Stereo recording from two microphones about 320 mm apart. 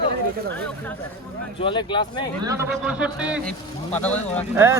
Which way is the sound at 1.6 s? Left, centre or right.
Centre.